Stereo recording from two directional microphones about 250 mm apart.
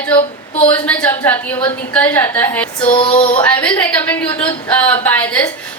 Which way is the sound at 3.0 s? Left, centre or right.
Left.